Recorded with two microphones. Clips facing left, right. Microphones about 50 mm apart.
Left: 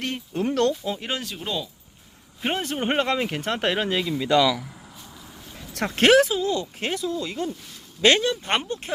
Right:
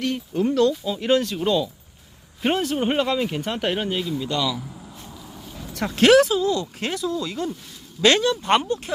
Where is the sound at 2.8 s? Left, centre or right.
Left.